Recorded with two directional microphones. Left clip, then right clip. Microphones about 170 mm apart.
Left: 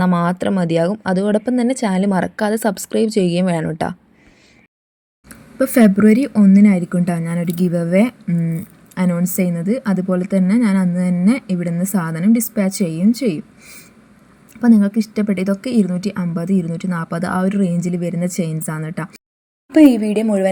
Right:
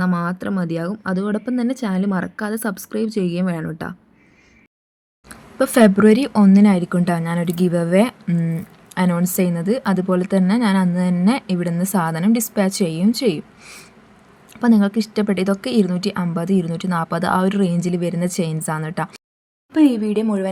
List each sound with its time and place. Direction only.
0.0 s speech: 25° left (ahead or behind)
5.3 s a woman's voice: centre (ahead or behind)